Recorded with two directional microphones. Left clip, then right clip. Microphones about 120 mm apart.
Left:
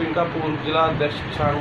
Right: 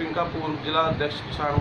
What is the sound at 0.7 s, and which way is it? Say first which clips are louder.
Speech: left 3 dB; centre (ahead or behind).